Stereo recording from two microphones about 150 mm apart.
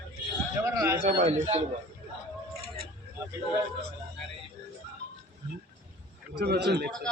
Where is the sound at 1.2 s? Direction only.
45° right (ahead or behind).